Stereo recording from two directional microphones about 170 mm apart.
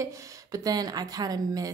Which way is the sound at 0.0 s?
20° right (ahead or behind).